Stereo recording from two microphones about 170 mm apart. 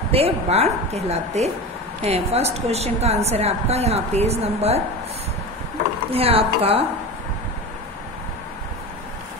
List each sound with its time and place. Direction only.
0.1 s a woman's voice: 35° right (ahead or behind)
6.0 s a woman's voice: 35° right (ahead or behind)